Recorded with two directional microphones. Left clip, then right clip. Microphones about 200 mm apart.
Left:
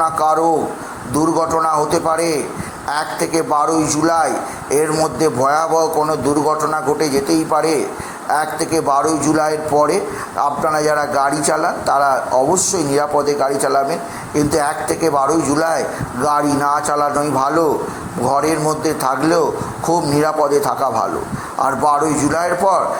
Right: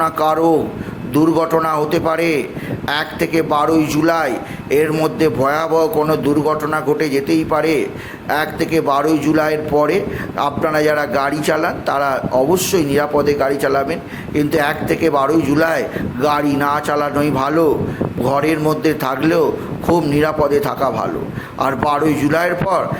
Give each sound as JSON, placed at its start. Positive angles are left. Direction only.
{"t": 0.0, "sound": "a man's voice", "side_deg": -45}